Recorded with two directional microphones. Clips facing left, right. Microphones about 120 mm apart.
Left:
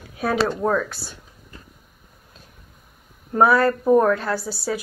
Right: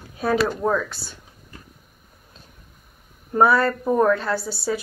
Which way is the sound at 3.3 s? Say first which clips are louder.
Left 1 dB; centre (ahead or behind).